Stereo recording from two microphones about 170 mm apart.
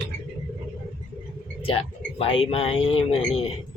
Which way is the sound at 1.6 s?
35° left (ahead or behind).